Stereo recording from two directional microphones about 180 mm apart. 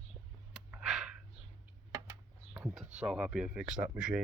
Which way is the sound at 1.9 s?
15° right (ahead or behind).